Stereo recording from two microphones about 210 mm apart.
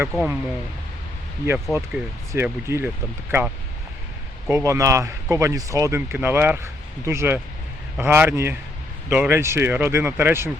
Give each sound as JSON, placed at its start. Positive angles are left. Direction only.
{"t": 0.1, "sound": "speech", "side_deg": 0}
{"t": 1.5, "sound": "speech", "side_deg": -5}
{"t": 4.4, "sound": "speech", "side_deg": -15}